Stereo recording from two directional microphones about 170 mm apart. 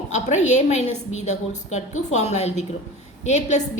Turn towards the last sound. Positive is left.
turn(degrees=40)  # may be behind; listen again after turning